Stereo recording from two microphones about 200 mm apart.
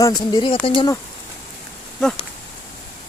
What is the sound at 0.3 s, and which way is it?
Speech, 25° left (ahead or behind).